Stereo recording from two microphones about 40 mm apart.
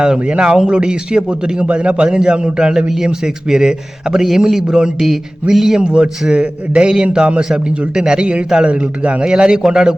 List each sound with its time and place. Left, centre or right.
0.0 s a man's voice: right
5.8 s a man's voice: right
9.2 s a man's voice: centre